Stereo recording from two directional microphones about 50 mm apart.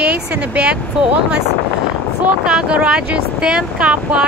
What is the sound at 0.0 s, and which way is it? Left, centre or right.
Speech, right.